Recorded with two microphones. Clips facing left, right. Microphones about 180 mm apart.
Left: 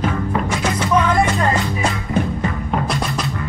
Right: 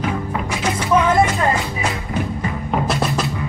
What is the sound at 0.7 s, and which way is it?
Music, 10° right (ahead or behind).